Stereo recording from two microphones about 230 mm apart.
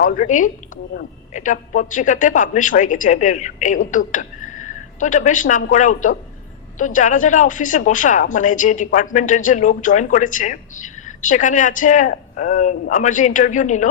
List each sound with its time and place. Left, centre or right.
0.0 s a man's voice: left